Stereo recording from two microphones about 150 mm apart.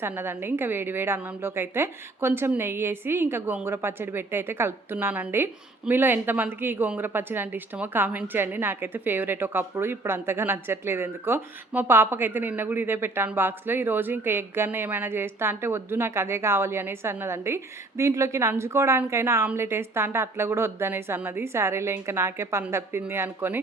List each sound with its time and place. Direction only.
0.0 s speech: 15° right (ahead or behind)